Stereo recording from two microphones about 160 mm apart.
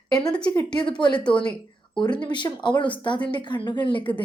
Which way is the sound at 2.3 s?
30° left (ahead or behind).